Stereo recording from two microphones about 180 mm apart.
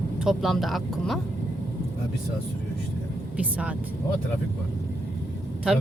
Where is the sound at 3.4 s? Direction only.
5° right (ahead or behind).